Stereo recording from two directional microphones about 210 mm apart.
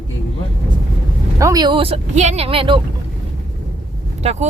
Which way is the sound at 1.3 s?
15° right (ahead or behind).